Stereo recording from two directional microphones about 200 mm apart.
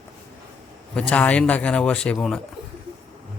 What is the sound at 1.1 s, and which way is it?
Speech, 5° left (ahead or behind).